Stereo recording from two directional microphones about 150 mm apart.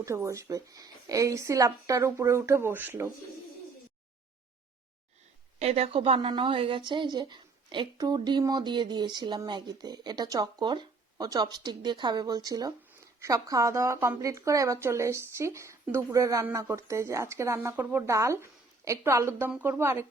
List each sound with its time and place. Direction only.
0.0 s a woman's voice: 20° right (ahead or behind)
5.5 s a woman's voice: 45° right (ahead or behind); by 20.1 s 15° right (ahead or behind)